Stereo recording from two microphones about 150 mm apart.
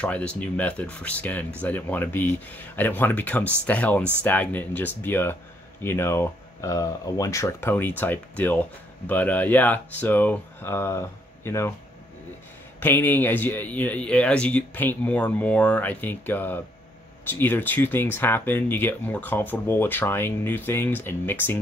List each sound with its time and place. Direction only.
0.0 s speech: 10° left (ahead or behind)
12.8 s speech: 15° left (ahead or behind)